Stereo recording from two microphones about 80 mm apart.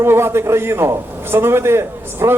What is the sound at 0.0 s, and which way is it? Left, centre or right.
A man's voice, right.